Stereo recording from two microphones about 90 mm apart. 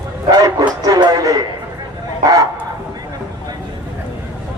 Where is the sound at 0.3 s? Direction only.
50° right (ahead or behind).